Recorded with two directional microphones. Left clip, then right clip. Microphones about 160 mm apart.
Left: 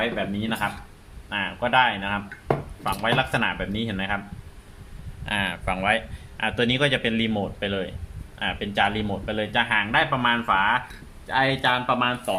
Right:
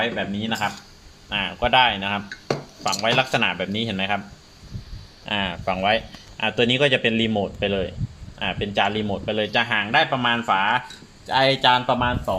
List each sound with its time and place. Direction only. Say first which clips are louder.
0.0 s speech: right 2 dB; 30° right (ahead or behind)
5.2 s speech: right 1 dB; 40° right (ahead or behind); by 10.8 s 55° right (ahead or behind)
11.3 s speech: right 4 dB; 75° right (ahead or behind)